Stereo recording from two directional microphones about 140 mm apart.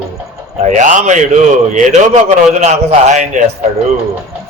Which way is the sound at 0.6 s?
60° right (ahead or behind).